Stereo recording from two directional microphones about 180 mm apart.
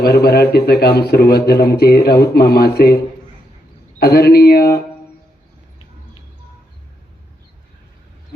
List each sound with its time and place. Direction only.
0.0 s a man's voice: 60° left (ahead or behind)
4.0 s a man's voice: 60° left (ahead or behind)